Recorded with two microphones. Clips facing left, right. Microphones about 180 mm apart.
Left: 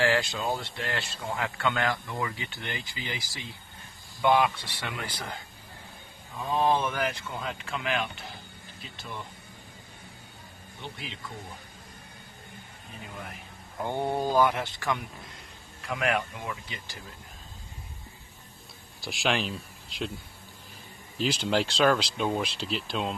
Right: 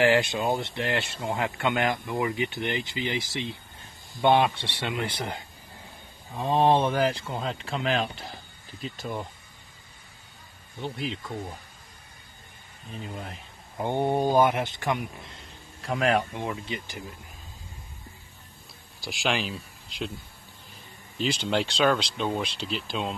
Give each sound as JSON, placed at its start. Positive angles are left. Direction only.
{"t": 0.0, "sound": "speech", "side_deg": -20}
{"t": 10.8, "sound": "speech", "side_deg": -40}
{"t": 13.7, "sound": "speech", "side_deg": -20}
{"t": 15.8, "sound": "speech", "side_deg": -35}
{"t": 18.9, "sound": "speech", "side_deg": 0}
{"t": 21.2, "sound": "speech", "side_deg": 0}